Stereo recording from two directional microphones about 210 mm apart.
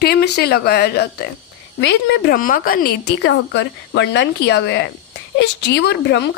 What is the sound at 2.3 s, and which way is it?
A woman's voice, 40° left (ahead or behind).